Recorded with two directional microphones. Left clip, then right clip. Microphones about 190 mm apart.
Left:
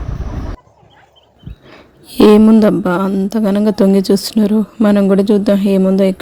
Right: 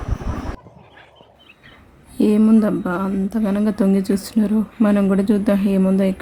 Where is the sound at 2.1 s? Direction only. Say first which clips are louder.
Left 11 dB; 45° left (ahead or behind).